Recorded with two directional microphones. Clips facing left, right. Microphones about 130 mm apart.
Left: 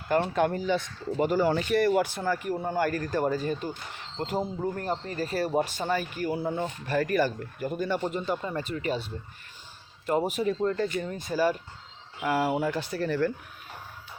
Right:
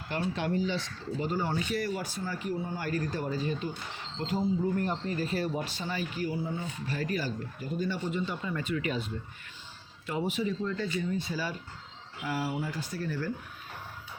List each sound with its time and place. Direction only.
0.1 s speech: 50° left (ahead or behind)
1.3 s speech: 85° left; by 2.5 s 65° left (ahead or behind)
2.5 s speech: 50° left (ahead or behind); by 9.1 s 35° left (ahead or behind)
10.1 s speech: 45° left (ahead or behind); by 13.3 s 65° left (ahead or behind)